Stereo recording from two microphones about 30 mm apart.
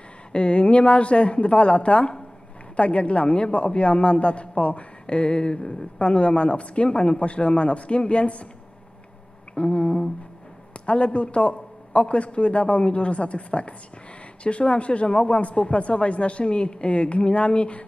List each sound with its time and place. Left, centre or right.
0.3 s a woman's voice: left
5.9 s a man's voice: left
9.6 s a woman's voice: left